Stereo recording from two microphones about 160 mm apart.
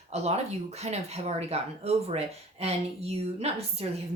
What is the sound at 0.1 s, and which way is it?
Speech, 40° right (ahead or behind).